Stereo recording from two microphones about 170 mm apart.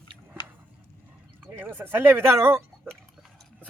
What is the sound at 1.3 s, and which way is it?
Speech, 10° right (ahead or behind).